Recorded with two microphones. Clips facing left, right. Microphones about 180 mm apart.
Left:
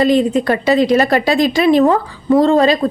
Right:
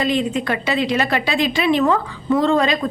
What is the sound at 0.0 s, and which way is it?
A woman's voice, 40° left (ahead or behind).